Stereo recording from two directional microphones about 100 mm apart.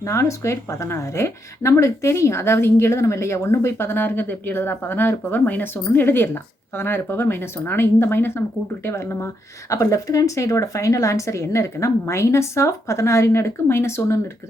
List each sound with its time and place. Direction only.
0.0 s speech: 30° left (ahead or behind)